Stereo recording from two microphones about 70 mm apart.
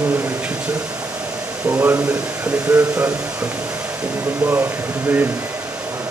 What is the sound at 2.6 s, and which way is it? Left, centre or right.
Speech, centre.